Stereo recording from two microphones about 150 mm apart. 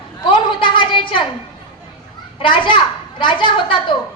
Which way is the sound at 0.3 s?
35° left (ahead or behind).